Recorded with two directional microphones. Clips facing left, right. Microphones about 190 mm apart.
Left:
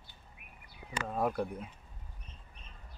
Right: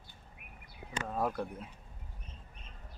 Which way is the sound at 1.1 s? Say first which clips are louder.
Left 2 dB; 10° left (ahead or behind).